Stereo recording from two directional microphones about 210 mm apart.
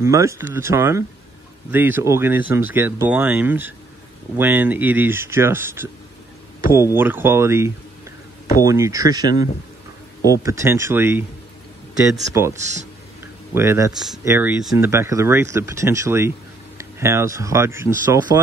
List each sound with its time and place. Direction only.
0.0 s speech: 15° right (ahead or behind)
12.3 s speech: 15° right (ahead or behind)
12.5 s speech: 35° right (ahead or behind)
13.6 s speech: 15° right (ahead or behind)
13.9 s speech: centre (ahead or behind)